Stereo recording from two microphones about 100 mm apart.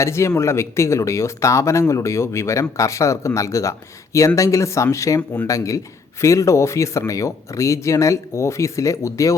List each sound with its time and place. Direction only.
0.0 s speech: 30° left (ahead or behind)